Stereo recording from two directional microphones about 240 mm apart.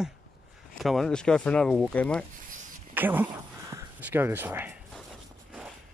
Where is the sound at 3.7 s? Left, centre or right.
Centre.